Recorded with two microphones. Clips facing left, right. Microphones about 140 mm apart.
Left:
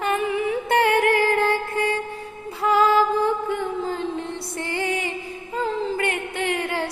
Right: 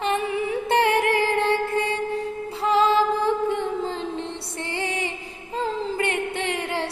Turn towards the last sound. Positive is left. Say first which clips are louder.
# left 2 dB
turn(degrees=-30)  # may be behind; listen again after turning